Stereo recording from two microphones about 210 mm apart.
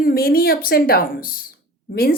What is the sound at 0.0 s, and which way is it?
Speech, 45° left (ahead or behind).